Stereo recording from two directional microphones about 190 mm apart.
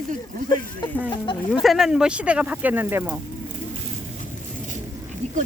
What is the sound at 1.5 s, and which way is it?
Speech, centre (ahead or behind).